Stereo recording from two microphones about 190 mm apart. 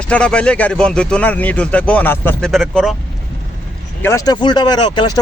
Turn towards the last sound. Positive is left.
turn(degrees=25)  # may be behind; listen again after turning